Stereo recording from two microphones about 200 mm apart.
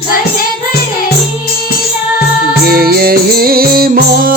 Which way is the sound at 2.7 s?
50° right (ahead or behind).